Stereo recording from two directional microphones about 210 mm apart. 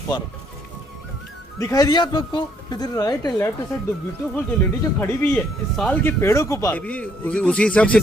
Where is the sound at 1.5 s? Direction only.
15° left (ahead or behind).